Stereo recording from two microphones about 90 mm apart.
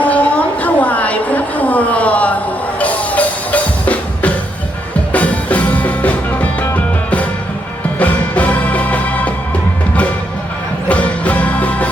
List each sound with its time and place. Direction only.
0.0 s a sound: 15° left (ahead or behind)
5.1 s music: 15° left (ahead or behind)
10.8 s music: 15° left (ahead or behind)